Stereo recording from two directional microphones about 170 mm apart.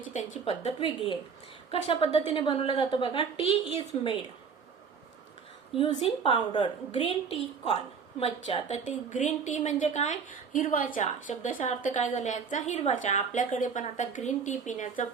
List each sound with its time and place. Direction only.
0.1 s a woman's voice: 45° left (ahead or behind)
5.7 s a woman's voice: 30° left (ahead or behind); by 15.0 s 50° left (ahead or behind)